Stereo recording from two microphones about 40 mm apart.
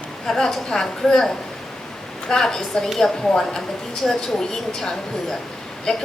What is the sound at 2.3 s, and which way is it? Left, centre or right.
A woman's voice, centre.